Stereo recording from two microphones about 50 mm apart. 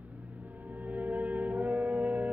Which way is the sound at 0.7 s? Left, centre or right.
Right.